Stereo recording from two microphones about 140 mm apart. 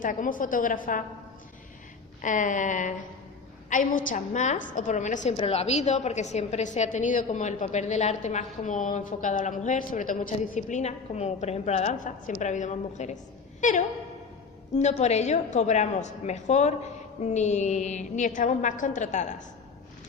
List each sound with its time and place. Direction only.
0.0 s a woman's voice: 70° left (ahead or behind)
2.2 s a woman's voice: 65° left (ahead or behind)
5.4 s a woman's voice: 50° left (ahead or behind)